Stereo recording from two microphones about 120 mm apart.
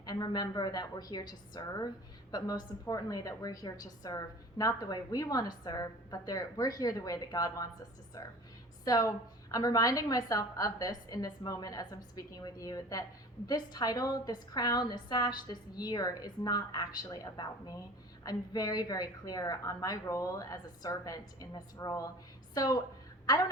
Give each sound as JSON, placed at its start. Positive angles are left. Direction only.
{"t": 0.0, "sound": "a woman's voice", "side_deg": 35}
{"t": 8.8, "sound": "a woman's voice", "side_deg": 30}